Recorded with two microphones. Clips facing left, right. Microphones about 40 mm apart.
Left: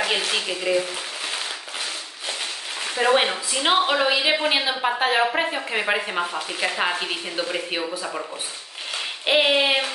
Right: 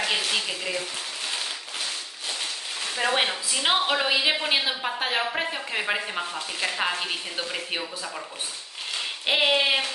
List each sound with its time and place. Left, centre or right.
0.3 s a woman's voice: centre
2.8 s a woman's voice: centre
9.2 s a woman's voice: centre